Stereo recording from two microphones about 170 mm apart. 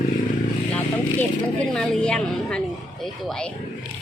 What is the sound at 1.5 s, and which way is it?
A woman's voice, 5° left (ahead or behind).